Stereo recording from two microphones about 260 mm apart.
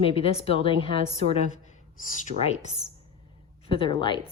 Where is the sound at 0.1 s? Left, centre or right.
Left.